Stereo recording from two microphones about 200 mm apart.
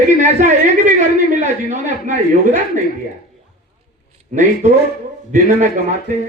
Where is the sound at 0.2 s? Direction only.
40° right (ahead or behind).